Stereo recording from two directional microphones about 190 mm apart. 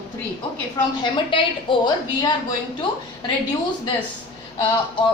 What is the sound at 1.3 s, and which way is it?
A woman's voice, 25° left (ahead or behind).